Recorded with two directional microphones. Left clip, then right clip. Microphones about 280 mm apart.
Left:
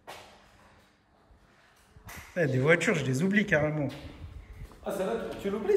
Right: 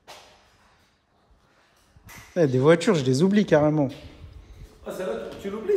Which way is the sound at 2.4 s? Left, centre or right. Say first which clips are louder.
Right 6 dB; centre.